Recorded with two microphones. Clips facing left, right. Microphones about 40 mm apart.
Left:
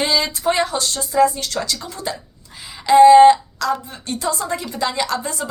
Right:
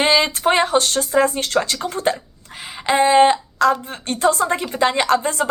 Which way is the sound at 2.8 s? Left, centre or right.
Right.